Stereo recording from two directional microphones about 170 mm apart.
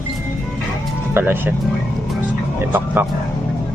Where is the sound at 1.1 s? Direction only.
15° right (ahead or behind).